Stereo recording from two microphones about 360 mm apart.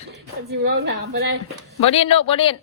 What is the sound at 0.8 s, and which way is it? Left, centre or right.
Speech, right.